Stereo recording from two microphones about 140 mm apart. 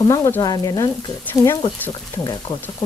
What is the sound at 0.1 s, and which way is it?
Speech, 25° left (ahead or behind).